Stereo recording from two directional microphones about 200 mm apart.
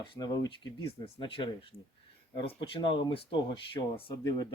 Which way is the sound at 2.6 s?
25° left (ahead or behind).